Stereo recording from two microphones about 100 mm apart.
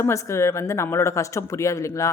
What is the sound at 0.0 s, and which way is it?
Speech, 30° left (ahead or behind).